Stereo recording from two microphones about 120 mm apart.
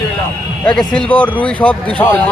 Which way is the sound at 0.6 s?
5° left (ahead or behind).